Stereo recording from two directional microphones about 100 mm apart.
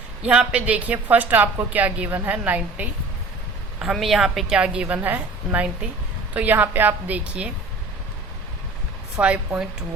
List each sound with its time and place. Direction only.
0.2 s speech: 10° right (ahead or behind)
3.9 s speech: centre (ahead or behind)
9.1 s speech: 10° right (ahead or behind)